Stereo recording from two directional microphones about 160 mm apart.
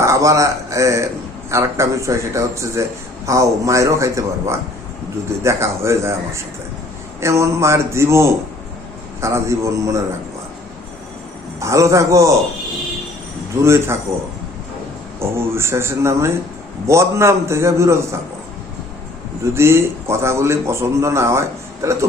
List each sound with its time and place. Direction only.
0.0 s a man's voice: 20° right (ahead or behind)
11.6 s a man's voice: 20° right (ahead or behind)
13.6 s a man's voice: 15° right (ahead or behind)
15.2 s a man's voice: 15° right (ahead or behind)
19.5 s a man's voice: 15° right (ahead or behind)